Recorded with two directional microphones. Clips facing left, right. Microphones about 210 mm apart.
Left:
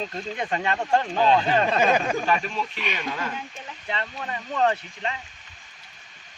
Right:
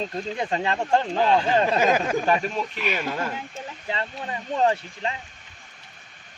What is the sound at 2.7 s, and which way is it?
Speech, 5° right (ahead or behind).